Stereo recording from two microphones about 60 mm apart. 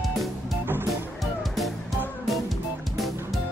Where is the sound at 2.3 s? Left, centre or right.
Centre.